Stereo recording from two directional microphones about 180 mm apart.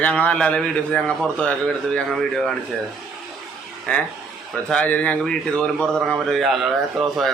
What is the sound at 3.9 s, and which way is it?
A man's voice, 5° left (ahead or behind).